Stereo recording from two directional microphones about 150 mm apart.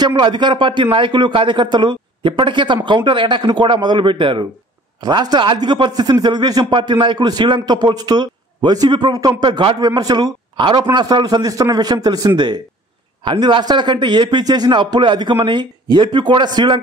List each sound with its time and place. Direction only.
0.0 s a man's voice: 30° right (ahead or behind)